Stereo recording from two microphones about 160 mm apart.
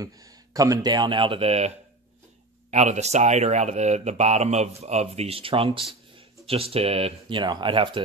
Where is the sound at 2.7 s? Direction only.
45° right (ahead or behind).